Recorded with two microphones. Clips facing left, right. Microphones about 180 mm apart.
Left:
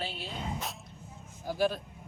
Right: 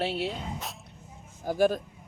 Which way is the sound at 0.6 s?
Centre (ahead or behind).